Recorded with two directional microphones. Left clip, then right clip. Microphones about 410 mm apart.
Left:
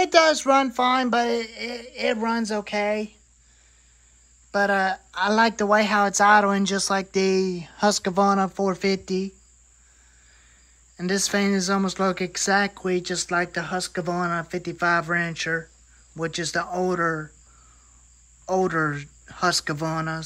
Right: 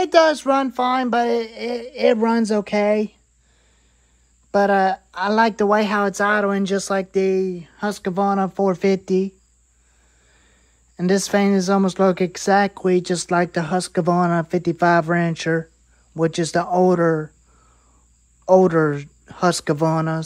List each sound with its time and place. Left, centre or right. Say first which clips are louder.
0.0 s speech: right 3 dB; centre
4.5 s speech: right 5 dB; centre
11.0 s speech: right 5 dB; centre
18.4 s speech: right 8 dB; centre